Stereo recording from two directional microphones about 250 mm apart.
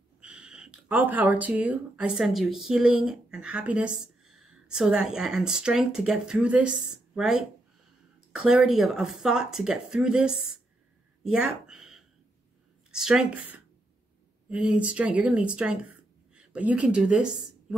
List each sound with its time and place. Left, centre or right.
0.2 s a woman's voice: centre